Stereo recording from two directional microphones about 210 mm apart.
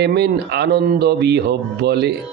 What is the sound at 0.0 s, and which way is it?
Speech, 50° right (ahead or behind).